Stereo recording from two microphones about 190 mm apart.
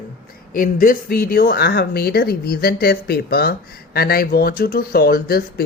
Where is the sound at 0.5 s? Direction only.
50° left (ahead or behind).